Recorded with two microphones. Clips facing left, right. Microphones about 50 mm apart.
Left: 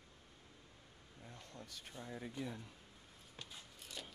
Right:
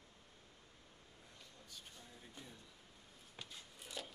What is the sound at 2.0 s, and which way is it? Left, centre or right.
Speech, left.